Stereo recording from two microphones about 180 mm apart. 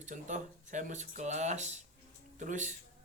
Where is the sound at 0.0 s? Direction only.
45° right (ahead or behind).